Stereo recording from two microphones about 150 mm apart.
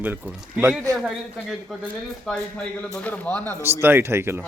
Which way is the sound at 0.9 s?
25° right (ahead or behind).